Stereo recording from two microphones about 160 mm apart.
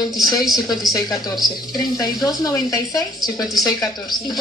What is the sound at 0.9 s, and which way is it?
Speech, 25° left (ahead or behind).